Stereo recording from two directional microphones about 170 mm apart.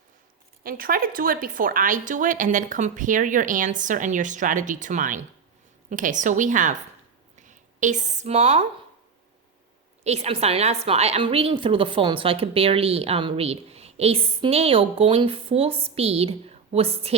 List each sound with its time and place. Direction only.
0.6 s speech: 55° right (ahead or behind); by 8.6 s 40° right (ahead or behind)
10.0 s a woman's voice: 40° right (ahead or behind)